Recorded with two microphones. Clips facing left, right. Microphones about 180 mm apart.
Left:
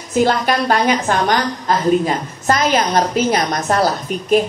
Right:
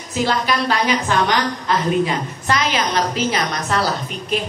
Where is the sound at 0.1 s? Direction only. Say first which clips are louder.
Left 5 dB; 50° left (ahead or behind).